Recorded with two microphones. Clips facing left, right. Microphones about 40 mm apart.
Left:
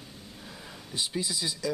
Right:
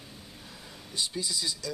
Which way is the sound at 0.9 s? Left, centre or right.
Centre.